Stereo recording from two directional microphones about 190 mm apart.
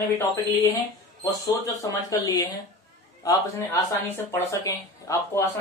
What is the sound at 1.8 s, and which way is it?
Speech, 20° left (ahead or behind).